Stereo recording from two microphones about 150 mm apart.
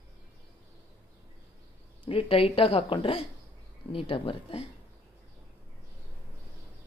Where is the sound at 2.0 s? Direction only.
35° left (ahead or behind).